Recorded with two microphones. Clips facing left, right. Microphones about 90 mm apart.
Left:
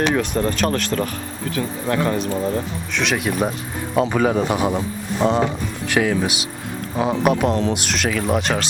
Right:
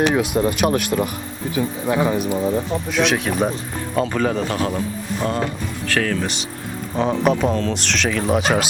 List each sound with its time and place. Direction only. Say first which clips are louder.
0.0 s a man's voice: right 2 dB; 10° right (ahead or behind)